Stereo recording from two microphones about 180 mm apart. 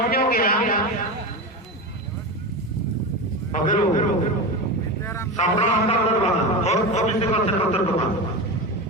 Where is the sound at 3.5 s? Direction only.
45° left (ahead or behind).